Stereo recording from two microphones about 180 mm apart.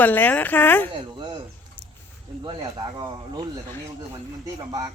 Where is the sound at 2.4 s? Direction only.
25° right (ahead or behind).